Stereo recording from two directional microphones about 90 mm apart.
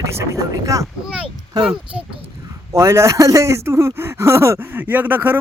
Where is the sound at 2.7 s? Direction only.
30° right (ahead or behind).